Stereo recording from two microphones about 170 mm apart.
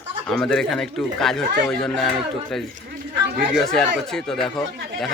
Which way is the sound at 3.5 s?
Centre (ahead or behind).